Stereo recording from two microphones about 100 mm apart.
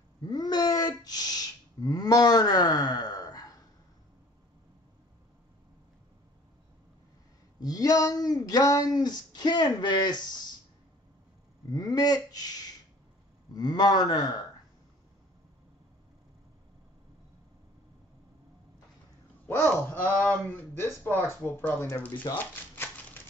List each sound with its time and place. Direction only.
0.2 s a sound: 45° left (ahead or behind)
7.6 s speech: 40° left (ahead or behind)
11.7 s a man's voice: 40° left (ahead or behind)
19.4 s speech: 20° left (ahead or behind)
22.3 s typewriter: 20° left (ahead or behind)